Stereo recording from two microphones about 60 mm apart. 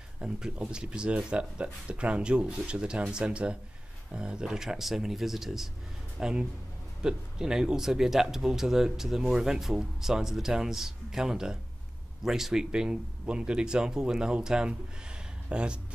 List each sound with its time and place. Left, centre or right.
0.2 s speech: centre